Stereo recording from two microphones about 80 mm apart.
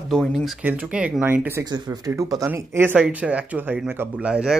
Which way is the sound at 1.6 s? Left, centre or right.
Right.